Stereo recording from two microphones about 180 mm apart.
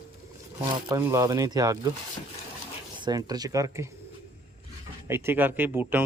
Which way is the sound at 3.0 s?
20° right (ahead or behind).